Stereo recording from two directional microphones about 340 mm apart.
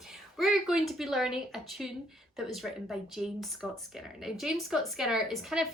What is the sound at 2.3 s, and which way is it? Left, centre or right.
Speech, centre.